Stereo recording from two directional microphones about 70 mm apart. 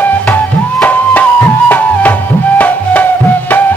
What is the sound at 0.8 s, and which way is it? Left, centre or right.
Music, left.